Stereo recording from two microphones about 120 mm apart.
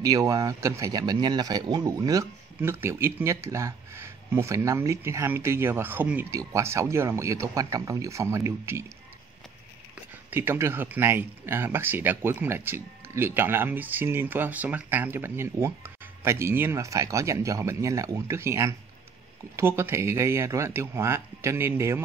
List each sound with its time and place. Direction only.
0.0 s speech: 30° right (ahead or behind)
10.3 s speech: 20° right (ahead or behind)